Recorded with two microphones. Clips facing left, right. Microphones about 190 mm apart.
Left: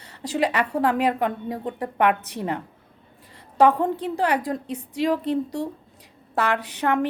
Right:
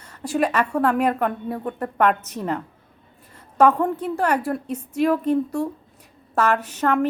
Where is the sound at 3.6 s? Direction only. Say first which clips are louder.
Right 1 dB; 15° left (ahead or behind).